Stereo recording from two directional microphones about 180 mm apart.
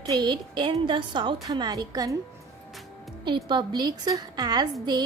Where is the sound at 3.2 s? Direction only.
25° right (ahead or behind).